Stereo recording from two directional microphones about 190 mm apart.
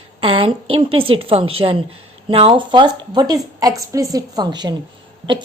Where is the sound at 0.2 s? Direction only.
30° right (ahead or behind).